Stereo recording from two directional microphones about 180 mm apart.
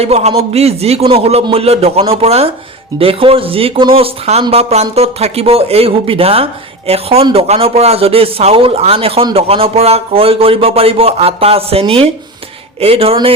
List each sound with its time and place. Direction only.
0.0 s speech: 35° right (ahead or behind)